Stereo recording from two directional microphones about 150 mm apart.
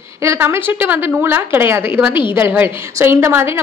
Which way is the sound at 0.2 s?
20° right (ahead or behind).